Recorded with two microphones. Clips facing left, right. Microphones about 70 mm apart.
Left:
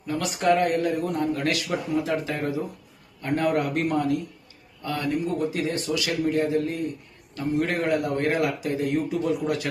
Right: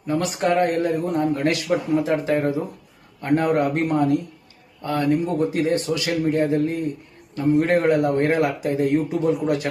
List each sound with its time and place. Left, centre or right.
0.1 s a man's voice: right